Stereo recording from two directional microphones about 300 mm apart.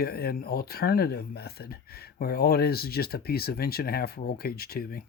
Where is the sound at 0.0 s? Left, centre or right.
Left.